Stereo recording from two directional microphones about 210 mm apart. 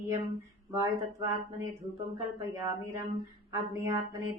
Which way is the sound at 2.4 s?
15° right (ahead or behind).